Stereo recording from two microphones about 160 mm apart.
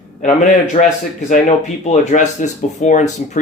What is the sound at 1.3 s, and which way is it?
Speech, 50° left (ahead or behind).